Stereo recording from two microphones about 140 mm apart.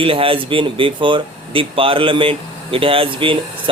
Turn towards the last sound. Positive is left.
turn(degrees=-40)  # may be behind; listen again after turning